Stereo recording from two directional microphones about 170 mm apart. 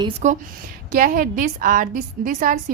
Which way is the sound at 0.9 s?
55° right (ahead or behind).